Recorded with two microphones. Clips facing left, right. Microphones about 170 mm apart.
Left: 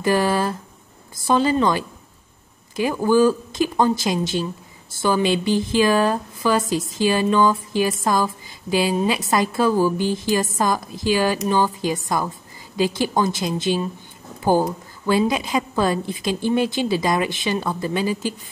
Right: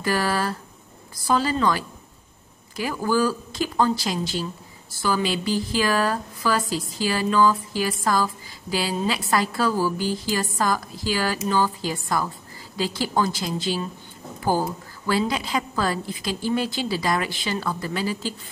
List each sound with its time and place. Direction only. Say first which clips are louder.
0.0 s speech: left 5 dB; 20° left (ahead or behind)